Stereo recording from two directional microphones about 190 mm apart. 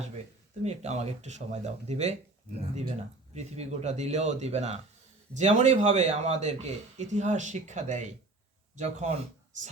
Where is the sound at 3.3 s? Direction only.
35° right (ahead or behind).